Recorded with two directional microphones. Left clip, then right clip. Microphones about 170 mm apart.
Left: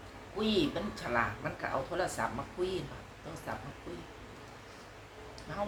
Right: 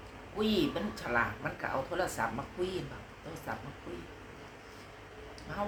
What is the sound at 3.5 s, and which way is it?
Speech, 15° right (ahead or behind).